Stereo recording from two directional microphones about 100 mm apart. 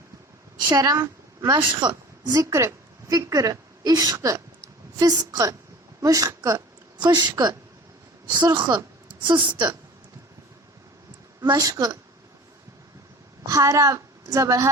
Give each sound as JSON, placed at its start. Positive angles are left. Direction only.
{"t": 0.7, "sound": "a woman's voice", "side_deg": -40}
{"t": 2.3, "sound": "a woman's voice", "side_deg": -30}
{"t": 11.3, "sound": "a woman's voice", "side_deg": -35}
{"t": 13.5, "sound": "a woman's voice", "side_deg": -30}